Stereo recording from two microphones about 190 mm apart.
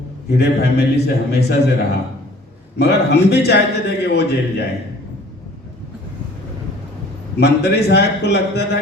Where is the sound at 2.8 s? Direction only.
60° left (ahead or behind).